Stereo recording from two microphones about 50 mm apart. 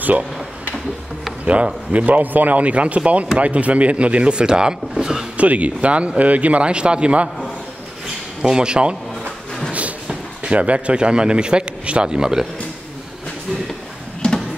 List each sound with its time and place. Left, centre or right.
1.4 s speech: right
5.4 s speech: right
8.4 s a man's voice: centre
9.7 s a sound: right
10.0 s speech: right
14.2 s a sound: centre